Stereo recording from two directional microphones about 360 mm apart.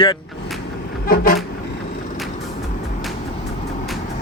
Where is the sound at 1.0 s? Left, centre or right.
Left.